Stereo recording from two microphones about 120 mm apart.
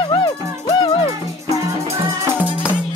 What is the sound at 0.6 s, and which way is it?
Music, 35° left (ahead or behind).